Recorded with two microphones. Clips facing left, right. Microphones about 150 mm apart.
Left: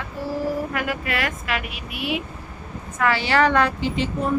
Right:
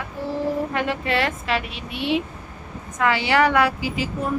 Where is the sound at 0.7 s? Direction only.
30° right (ahead or behind).